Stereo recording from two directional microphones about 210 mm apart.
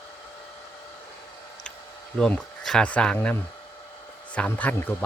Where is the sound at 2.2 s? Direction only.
5° left (ahead or behind).